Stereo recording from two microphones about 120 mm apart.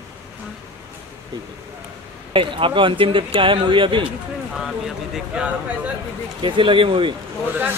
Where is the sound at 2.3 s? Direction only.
45° right (ahead or behind).